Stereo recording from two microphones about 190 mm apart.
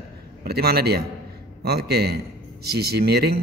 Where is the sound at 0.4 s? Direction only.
55° right (ahead or behind).